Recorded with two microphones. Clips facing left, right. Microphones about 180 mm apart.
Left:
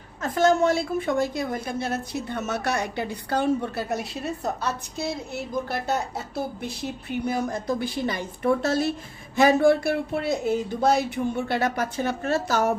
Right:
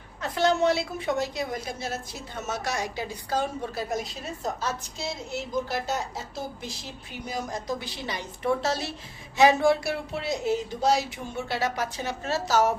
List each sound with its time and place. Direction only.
0.2 s a woman's voice: 45° left (ahead or behind)